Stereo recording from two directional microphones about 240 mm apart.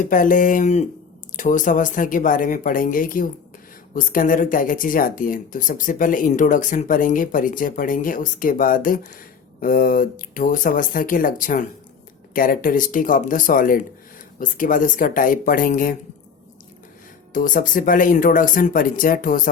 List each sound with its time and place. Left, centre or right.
0.0 s speech: left
17.3 s speech: left